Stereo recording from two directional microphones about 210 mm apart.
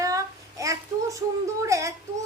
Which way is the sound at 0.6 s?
15° right (ahead or behind).